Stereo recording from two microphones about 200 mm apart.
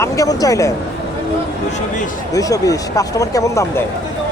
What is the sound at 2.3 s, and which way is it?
Speech, 15° left (ahead or behind).